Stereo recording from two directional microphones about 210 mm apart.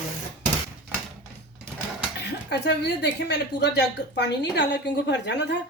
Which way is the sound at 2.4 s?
50° left (ahead or behind).